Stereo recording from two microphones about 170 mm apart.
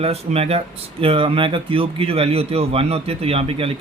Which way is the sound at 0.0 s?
35° right (ahead or behind).